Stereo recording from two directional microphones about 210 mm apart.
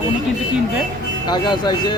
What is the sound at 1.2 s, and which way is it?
Speech, 20° left (ahead or behind).